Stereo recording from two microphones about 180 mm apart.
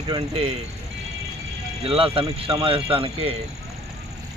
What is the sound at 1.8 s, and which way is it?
Speech, 30° right (ahead or behind).